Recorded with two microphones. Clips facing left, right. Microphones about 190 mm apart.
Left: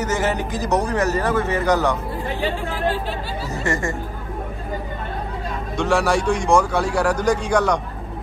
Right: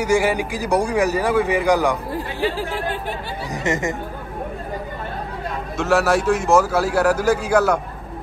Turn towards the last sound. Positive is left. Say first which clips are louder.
# right 2 dB
turn(degrees=-5)  # may be behind; listen again after turning